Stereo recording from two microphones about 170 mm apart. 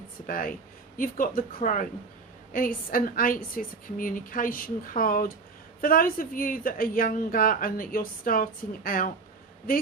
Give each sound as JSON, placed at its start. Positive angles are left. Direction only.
{"t": 0.3, "sound": "speech", "side_deg": 55}